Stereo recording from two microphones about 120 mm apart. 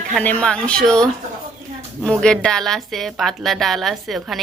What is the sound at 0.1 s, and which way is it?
Speech, 10° left (ahead or behind).